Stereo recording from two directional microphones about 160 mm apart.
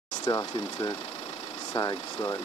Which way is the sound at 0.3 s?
25° left (ahead or behind).